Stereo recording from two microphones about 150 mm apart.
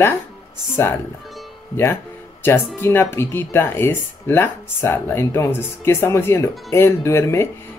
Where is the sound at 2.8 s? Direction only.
15° left (ahead or behind).